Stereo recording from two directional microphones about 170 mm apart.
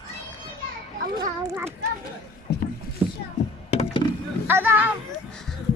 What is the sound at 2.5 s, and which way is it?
Rowboat, 65° left (ahead or behind).